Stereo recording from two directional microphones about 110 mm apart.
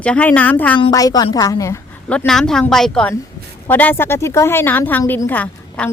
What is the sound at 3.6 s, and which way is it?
A woman's voice, 15° left (ahead or behind).